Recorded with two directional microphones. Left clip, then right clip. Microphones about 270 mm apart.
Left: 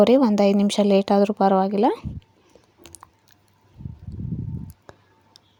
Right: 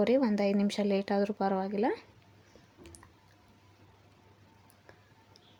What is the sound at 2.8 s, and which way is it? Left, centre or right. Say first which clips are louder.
Typing: left 9 dB; left.